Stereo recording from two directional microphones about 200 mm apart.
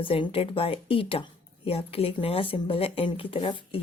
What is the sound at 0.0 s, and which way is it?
Speech, 25° left (ahead or behind).